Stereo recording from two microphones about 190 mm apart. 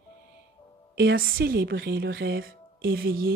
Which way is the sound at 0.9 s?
55° right (ahead or behind).